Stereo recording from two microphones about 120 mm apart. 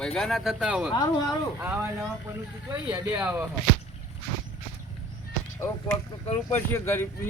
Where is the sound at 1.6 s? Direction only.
20° right (ahead or behind).